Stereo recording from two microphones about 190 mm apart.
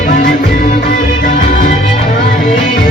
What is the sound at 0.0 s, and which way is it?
Music, 45° left (ahead or behind).